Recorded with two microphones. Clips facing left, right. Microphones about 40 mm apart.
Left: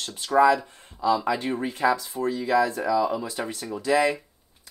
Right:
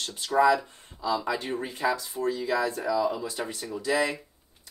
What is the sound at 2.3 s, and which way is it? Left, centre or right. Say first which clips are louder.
Speech: left 6 dB; centre.